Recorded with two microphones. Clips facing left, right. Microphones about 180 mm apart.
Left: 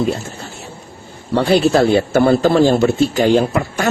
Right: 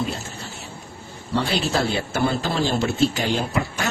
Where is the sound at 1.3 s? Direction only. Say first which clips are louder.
Left 10 dB; 50° left (ahead or behind).